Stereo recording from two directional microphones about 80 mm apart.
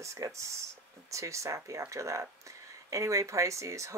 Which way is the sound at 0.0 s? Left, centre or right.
Right.